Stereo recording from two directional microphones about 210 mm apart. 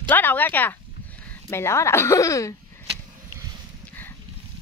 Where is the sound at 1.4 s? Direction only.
15° left (ahead or behind).